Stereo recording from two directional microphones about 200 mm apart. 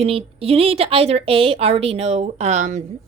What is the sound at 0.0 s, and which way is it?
A woman's voice, 30° right (ahead or behind).